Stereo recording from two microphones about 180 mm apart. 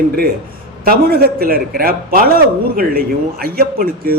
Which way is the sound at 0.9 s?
60° right (ahead or behind).